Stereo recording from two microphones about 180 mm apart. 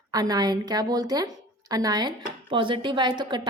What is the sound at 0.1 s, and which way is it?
A woman's voice, 20° right (ahead or behind).